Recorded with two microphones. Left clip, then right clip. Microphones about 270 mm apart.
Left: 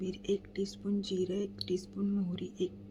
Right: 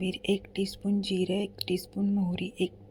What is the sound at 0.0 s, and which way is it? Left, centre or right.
A woman's voice, centre.